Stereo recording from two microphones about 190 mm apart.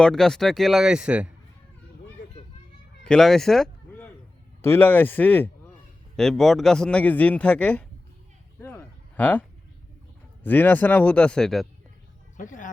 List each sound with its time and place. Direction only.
0.0 s a man's voice: centre (ahead or behind)
3.0 s a sound: 5° left (ahead or behind)
4.6 s a man's voice: 10° left (ahead or behind)
8.5 s a sound: 10° left (ahead or behind)
10.4 s a man's voice: 10° left (ahead or behind)
12.4 s speech: 45° left (ahead or behind)